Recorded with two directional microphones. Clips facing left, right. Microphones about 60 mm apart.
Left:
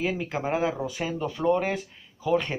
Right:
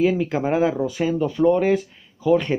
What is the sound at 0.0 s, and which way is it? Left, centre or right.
Speech, centre.